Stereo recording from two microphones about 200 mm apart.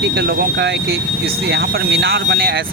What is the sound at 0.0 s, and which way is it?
Speech, 55° right (ahead or behind).